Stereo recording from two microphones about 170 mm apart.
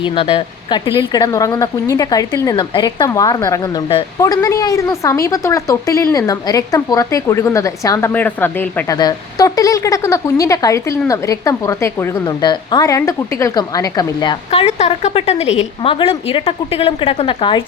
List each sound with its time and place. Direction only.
0.0 s a woman's voice: 30° left (ahead or behind)
4.2 s a woman's voice: 20° left (ahead or behind)
9.0 s a woman's voice: 20° left (ahead or behind)